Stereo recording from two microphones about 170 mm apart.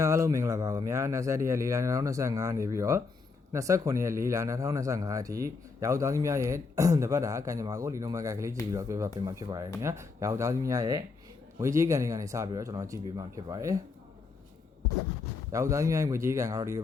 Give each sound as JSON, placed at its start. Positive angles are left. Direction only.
{"t": 0.0, "sound": "a man's voice", "side_deg": -15}
{"t": 15.5, "sound": "speech", "side_deg": -15}